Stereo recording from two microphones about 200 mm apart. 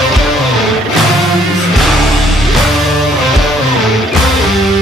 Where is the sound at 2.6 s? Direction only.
Centre (ahead or behind).